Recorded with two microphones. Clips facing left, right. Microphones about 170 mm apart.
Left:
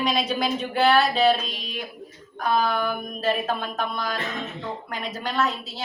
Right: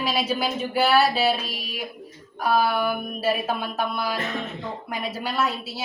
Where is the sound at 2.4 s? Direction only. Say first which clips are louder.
Right 1 dB; 10° right (ahead or behind).